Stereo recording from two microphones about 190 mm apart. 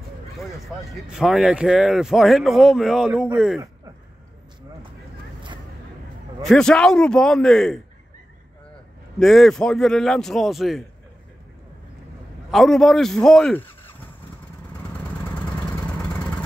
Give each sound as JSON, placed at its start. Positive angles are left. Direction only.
{"t": 1.1, "sound": "speech", "side_deg": 0}
{"t": 6.4, "sound": "speech", "side_deg": 5}
{"t": 9.2, "sound": "speech", "side_deg": 0}
{"t": 12.4, "sound": "speech", "side_deg": 0}